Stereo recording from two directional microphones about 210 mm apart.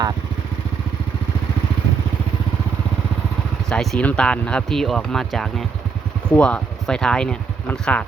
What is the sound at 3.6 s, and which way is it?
Speech, 5° left (ahead or behind).